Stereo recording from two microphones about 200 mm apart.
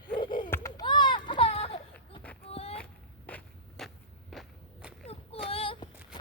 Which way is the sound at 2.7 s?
5° left (ahead or behind).